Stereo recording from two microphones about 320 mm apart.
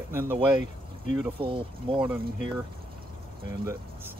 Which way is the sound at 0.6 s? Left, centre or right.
Left.